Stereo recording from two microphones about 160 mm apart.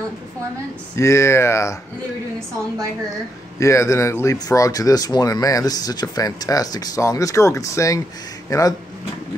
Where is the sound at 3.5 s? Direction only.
20° left (ahead or behind).